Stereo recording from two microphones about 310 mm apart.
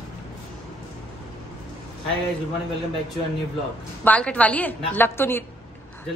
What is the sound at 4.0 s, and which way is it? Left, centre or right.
A woman's voice, centre.